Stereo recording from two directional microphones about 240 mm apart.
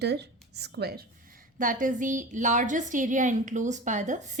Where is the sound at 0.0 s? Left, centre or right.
Right.